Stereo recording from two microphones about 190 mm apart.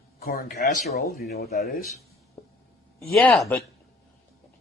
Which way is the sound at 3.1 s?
5° left (ahead or behind).